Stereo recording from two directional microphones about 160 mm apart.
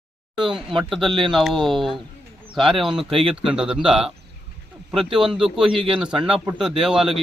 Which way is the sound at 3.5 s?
5° right (ahead or behind).